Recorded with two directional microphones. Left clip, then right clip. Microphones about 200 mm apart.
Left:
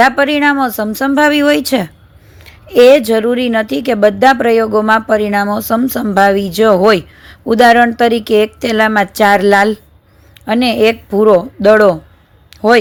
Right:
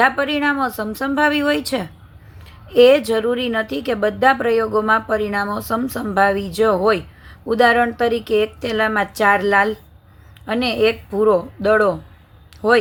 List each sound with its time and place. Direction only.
0.0 s speech: 35° left (ahead or behind)